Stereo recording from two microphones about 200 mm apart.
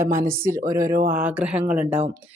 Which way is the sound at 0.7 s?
15° right (ahead or behind).